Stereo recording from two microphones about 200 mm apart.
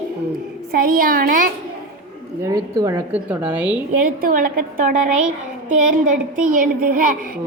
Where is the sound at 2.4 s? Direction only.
20° right (ahead or behind).